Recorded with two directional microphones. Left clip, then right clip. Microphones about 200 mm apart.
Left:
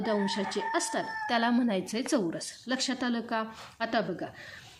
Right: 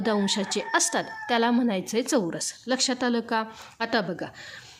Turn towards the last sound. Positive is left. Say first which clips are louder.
# right 3 dB
turn(degrees=-30)  # may be behind; listen again after turning